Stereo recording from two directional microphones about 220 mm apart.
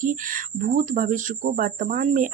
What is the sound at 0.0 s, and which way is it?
Speech, 40° right (ahead or behind).